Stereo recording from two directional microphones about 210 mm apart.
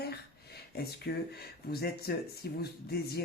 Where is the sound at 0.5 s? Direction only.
50° left (ahead or behind).